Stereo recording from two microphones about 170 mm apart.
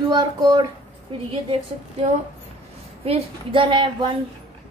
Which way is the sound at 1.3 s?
35° right (ahead or behind).